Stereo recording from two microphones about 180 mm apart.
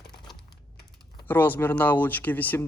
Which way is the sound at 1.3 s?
10° left (ahead or behind).